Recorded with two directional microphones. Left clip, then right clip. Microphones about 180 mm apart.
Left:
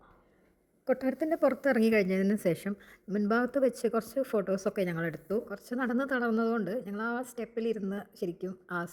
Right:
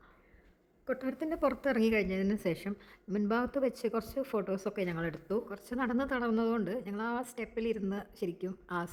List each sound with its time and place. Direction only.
0.9 s speech: 25° left (ahead or behind); by 8.9 s 5° left (ahead or behind)